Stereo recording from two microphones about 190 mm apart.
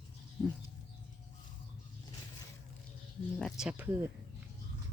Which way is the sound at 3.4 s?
5° right (ahead or behind).